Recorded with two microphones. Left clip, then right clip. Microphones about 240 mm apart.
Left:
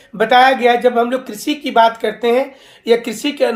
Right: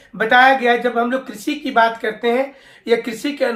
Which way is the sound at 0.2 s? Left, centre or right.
Left.